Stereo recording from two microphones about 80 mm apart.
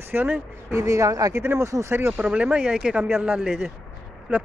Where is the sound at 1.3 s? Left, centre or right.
Right.